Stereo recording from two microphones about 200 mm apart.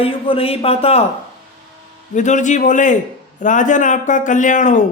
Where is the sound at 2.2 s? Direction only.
35° left (ahead or behind).